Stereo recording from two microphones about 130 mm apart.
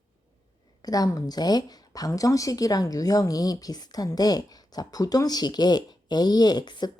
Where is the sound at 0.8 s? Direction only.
30° left (ahead or behind).